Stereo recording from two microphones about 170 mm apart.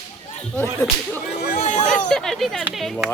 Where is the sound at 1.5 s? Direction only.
45° left (ahead or behind).